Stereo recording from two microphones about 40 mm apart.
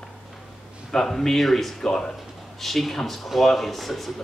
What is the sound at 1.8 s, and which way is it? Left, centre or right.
Speech, centre.